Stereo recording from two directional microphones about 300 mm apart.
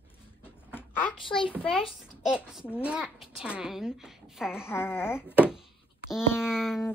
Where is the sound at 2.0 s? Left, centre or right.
Centre.